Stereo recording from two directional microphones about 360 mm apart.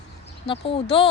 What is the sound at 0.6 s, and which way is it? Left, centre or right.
Speech, centre.